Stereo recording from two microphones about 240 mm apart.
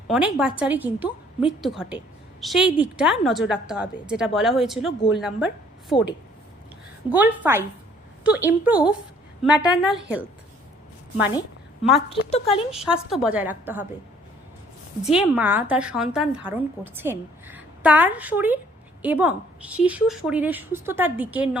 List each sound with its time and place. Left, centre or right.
0.1 s a woman's voice: centre
5.9 s speech: left
7.1 s a woman's voice: centre
11.8 s a woman's voice: centre
12.3 s speech: left
12.7 s a woman's voice: centre
15.0 s a woman's voice: centre